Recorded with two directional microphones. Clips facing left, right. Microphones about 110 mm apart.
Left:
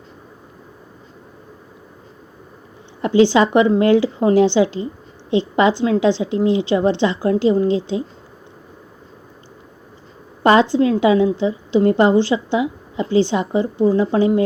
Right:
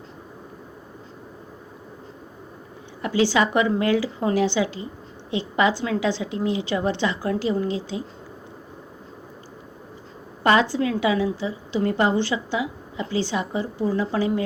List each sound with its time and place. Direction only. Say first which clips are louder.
3.0 s a woman's voice: left 7 dB; 25° left (ahead or behind)
10.4 s a woman's voice: left 6 dB; 25° left (ahead or behind)